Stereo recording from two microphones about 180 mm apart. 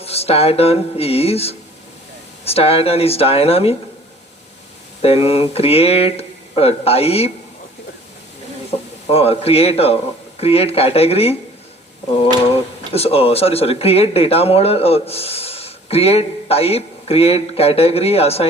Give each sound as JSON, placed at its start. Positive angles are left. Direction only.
{"t": 0.0, "sound": "speech", "side_deg": 35}
{"t": 5.0, "sound": "speech", "side_deg": 30}
{"t": 9.0, "sound": "speech", "side_deg": 35}
{"t": 12.9, "sound": "speech", "side_deg": 35}